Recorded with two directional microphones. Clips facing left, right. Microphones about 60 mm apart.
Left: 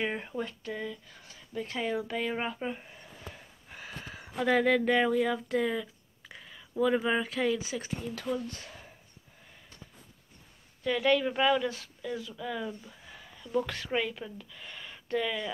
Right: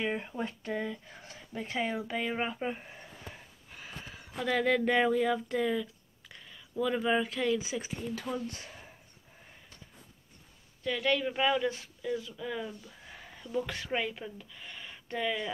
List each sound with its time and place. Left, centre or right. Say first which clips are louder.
0.0 s speech: even; centre
0.4 s speech: right 1 dB; right
1.6 s speech: left 1 dB; centre
3.7 s a sound: left 2 dB; centre
4.2 s speech: left 4 dB; centre
10.8 s speech: left 4 dB; centre
13.9 s speech: left 2 dB; centre